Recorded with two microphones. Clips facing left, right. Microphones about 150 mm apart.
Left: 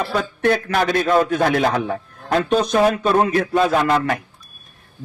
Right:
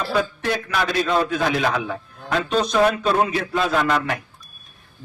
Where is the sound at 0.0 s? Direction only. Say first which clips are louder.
Left 3 dB; 55° left (ahead or behind).